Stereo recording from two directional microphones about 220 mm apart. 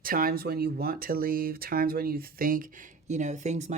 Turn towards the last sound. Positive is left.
turn(degrees=-30)  # may be behind; listen again after turning